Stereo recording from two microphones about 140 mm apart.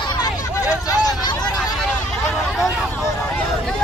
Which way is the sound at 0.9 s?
25° left (ahead or behind).